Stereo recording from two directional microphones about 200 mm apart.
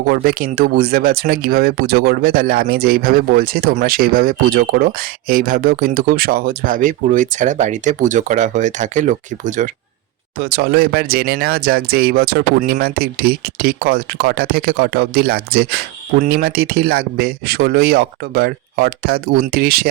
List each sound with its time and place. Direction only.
0.1 s speech: 45° right (ahead or behind)
10.4 s speech: 50° right (ahead or behind)